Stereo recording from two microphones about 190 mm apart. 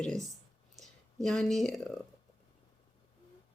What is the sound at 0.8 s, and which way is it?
Speech, centre (ahead or behind).